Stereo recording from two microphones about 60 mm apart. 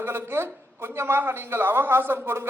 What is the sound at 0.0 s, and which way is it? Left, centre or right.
A man's voice, right.